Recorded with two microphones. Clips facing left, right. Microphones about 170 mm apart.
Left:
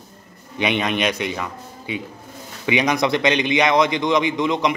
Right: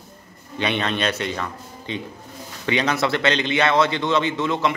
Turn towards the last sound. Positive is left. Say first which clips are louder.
# left 2 dB
turn(degrees=15)  # may be behind; listen again after turning